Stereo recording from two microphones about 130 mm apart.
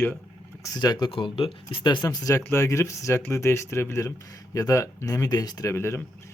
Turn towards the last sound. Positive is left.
turn(degrees=20)  # may be behind; listen again after turning